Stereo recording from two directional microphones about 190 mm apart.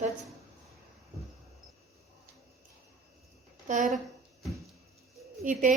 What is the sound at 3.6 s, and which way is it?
Speech, 40° right (ahead or behind).